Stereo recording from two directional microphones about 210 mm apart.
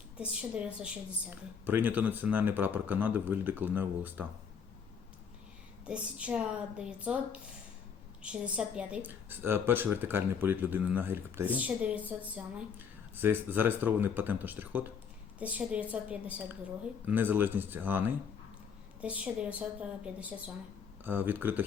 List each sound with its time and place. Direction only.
0.2 s a woman's voice: 5° right (ahead or behind)
5.8 s a woman's voice: 5° right (ahead or behind)
19.0 s a woman's voice: 5° right (ahead or behind)
21.0 s speech: 10° right (ahead or behind)